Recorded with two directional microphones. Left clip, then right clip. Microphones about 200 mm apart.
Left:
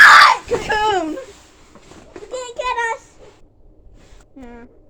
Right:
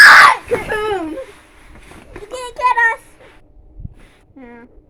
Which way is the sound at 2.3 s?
60° right (ahead or behind).